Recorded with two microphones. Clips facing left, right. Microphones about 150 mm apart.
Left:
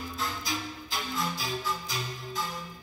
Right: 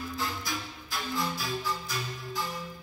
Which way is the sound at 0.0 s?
20° left (ahead or behind).